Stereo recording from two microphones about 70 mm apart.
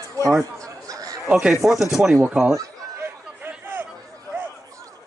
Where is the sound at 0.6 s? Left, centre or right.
Right.